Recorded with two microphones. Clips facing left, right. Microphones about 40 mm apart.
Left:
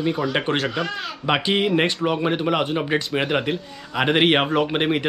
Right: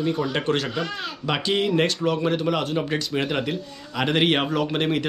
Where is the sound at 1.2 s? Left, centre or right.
Left.